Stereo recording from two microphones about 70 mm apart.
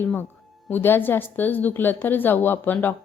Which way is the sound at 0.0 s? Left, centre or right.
Left.